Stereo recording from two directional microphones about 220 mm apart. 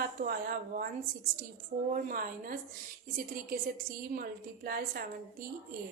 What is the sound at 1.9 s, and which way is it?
Speech, 40° right (ahead or behind).